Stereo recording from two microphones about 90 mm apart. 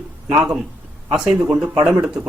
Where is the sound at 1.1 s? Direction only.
5° right (ahead or behind).